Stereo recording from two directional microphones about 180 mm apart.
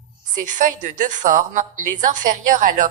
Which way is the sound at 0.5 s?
45° right (ahead or behind).